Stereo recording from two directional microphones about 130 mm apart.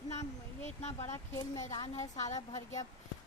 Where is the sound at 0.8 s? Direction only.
60° left (ahead or behind).